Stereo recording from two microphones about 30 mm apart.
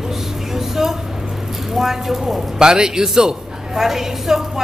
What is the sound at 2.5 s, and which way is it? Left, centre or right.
A man's voice, right.